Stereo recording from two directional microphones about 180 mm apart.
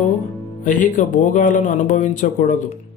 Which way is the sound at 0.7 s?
45° left (ahead or behind).